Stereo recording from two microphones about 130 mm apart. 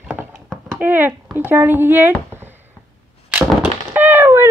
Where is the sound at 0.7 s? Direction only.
15° right (ahead or behind).